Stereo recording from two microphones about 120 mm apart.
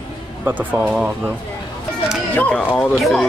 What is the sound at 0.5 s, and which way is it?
Speech, 15° right (ahead or behind).